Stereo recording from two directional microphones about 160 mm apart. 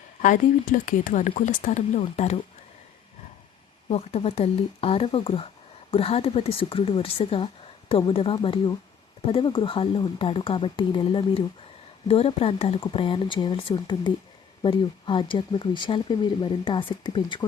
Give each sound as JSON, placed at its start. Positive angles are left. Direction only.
{"t": 0.2, "sound": "speech", "side_deg": 55}
{"t": 2.0, "sound": "a woman's voice", "side_deg": 40}
{"t": 3.8, "sound": "a woman's voice", "side_deg": 40}